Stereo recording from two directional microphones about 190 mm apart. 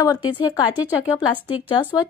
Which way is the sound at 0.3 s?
25° left (ahead or behind).